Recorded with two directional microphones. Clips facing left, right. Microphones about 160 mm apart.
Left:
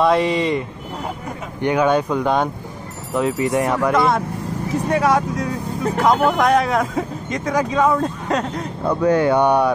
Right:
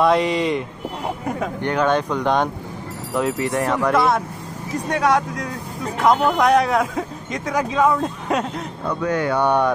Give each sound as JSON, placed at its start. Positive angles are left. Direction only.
{"t": 0.0, "sound": "speech", "side_deg": 0}
{"t": 1.6, "sound": "speech", "side_deg": 10}
{"t": 3.9, "sound": "speech", "side_deg": 0}
{"t": 8.8, "sound": "speech", "side_deg": 30}
{"t": 9.4, "sound": "speech", "side_deg": 15}